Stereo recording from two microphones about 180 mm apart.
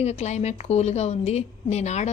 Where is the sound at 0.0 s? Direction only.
40° left (ahead or behind).